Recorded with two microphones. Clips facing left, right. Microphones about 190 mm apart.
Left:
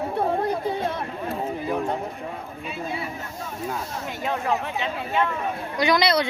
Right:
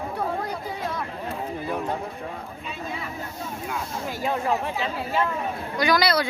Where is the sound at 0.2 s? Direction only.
25° left (ahead or behind).